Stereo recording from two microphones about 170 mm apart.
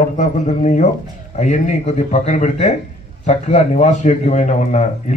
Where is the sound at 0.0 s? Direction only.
45° left (ahead or behind).